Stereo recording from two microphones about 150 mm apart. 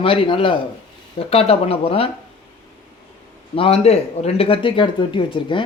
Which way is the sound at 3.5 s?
40° left (ahead or behind).